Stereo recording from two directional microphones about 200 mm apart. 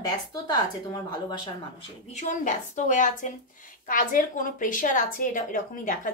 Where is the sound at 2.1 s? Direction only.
40° left (ahead or behind).